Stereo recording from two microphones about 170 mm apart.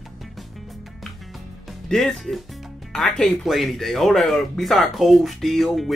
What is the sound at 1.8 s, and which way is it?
Speech, centre (ahead or behind).